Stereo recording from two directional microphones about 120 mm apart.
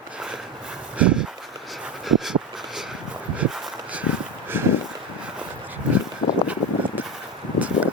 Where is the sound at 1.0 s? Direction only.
10° right (ahead or behind).